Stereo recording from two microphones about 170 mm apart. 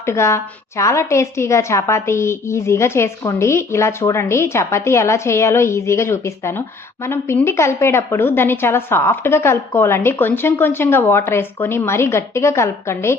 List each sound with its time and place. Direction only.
0.0 s a woman's voice: 15° left (ahead or behind)